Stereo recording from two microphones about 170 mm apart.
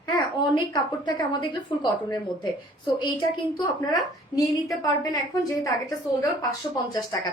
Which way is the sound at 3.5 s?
25° left (ahead or behind).